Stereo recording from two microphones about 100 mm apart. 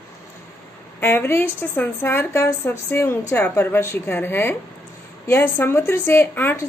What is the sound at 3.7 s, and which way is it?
Speech, 25° left (ahead or behind).